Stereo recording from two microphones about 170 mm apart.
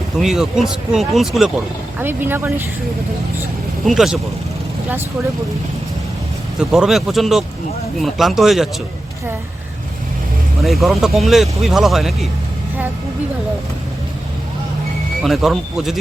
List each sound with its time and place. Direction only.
0.2 s speech: centre (ahead or behind)
2.0 s speech: 10° right (ahead or behind)
3.8 s speech: centre (ahead or behind)
6.6 s speech: 5° right (ahead or behind)
10.6 s speech: centre (ahead or behind)
15.2 s speech: centre (ahead or behind)